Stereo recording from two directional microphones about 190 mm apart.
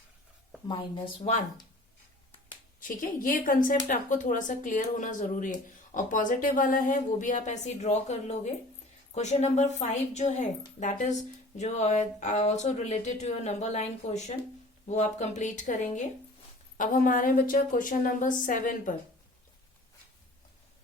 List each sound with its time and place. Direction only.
0.7 s a woman's voice: 25° left (ahead or behind)
2.8 s speech: 45° left (ahead or behind)